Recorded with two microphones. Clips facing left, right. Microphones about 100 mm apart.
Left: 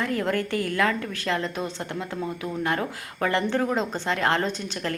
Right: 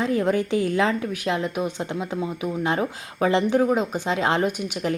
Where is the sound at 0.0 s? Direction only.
15° right (ahead or behind).